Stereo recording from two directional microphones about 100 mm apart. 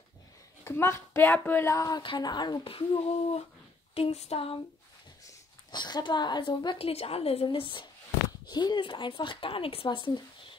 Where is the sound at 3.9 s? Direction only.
85° left.